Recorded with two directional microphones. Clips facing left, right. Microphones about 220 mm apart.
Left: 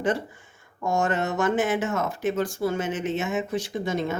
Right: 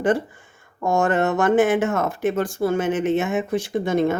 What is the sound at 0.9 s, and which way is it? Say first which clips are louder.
Speech: right 5 dB; 55° right (ahead or behind).